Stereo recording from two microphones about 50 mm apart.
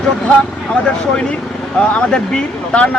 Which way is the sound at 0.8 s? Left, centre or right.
Centre.